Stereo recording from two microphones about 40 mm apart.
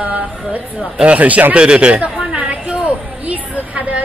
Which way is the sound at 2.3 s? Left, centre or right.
Right.